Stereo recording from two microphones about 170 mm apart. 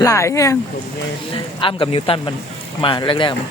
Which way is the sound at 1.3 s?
30° left (ahead or behind).